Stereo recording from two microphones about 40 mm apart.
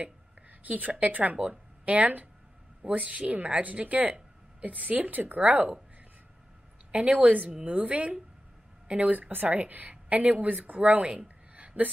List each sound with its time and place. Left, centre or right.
0.0 s a woman's voice: right
6.9 s a woman's voice: right